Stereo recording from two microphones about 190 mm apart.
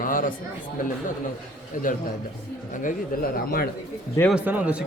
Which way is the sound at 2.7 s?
45° left (ahead or behind).